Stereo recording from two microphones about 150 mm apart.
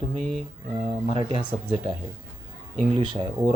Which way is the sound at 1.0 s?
35° right (ahead or behind).